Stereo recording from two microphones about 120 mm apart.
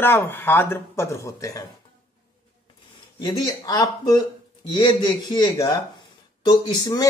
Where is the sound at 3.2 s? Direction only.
35° left (ahead or behind).